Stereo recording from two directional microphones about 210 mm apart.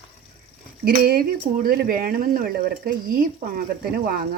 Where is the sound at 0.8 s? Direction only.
45° right (ahead or behind).